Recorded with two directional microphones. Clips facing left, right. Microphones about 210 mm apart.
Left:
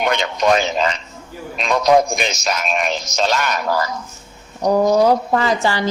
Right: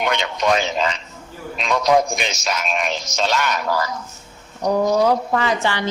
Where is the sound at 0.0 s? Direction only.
45° left (ahead or behind).